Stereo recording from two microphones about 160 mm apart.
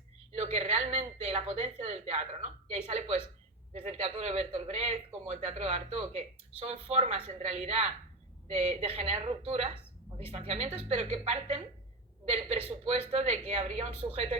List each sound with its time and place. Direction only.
0.3 s a woman's voice: 45° right (ahead or behind)